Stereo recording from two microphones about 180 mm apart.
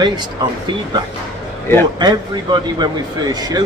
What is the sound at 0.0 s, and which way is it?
Speech, 25° right (ahead or behind).